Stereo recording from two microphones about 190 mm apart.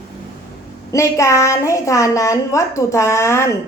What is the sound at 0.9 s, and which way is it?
A woman's voice, 15° left (ahead or behind).